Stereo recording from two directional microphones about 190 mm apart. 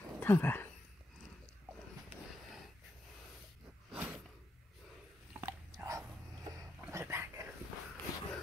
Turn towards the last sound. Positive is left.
turn(degrees=-15)  # may be behind; listen again after turning